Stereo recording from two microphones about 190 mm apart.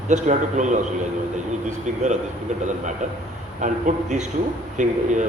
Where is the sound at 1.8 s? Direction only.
40° right (ahead or behind).